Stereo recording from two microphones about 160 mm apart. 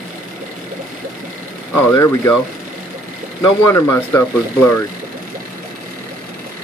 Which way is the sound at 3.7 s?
15° left (ahead or behind).